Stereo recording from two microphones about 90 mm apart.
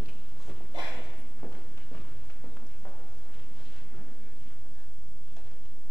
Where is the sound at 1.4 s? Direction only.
25° left (ahead or behind).